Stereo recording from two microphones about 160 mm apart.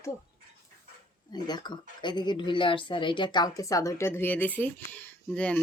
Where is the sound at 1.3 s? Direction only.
25° left (ahead or behind); by 5.6 s 10° left (ahead or behind).